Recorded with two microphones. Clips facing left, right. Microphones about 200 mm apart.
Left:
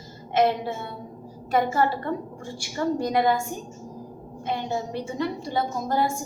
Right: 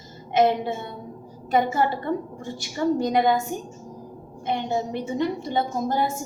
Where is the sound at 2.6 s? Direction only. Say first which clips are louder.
Right 3 dB; 20° right (ahead or behind).